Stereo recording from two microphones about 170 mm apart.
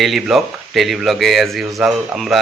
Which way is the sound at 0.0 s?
Centre (ahead or behind).